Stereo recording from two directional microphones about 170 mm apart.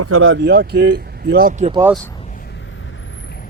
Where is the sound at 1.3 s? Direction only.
60° right (ahead or behind).